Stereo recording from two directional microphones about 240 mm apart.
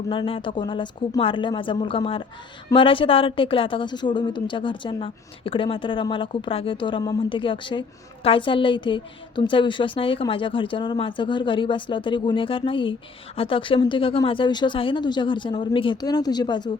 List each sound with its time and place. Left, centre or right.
0.1 s a woman's voice: left